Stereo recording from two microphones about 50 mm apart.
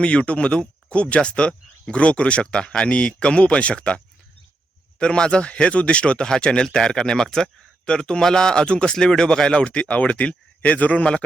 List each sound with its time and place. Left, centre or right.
0.0 s speech: left